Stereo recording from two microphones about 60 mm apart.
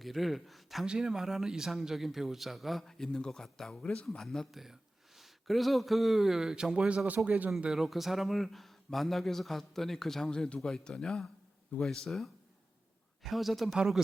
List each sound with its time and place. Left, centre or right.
0.0 s speech: centre
2.8 s speech: centre
4.5 s speech: centre; by 7.5 s right
7.7 s speech: centre